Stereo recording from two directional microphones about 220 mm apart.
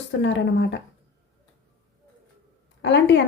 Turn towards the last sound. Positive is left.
turn(degrees=55)  # may be behind; listen again after turning